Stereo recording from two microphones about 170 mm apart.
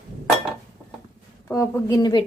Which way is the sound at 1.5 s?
15° left (ahead or behind).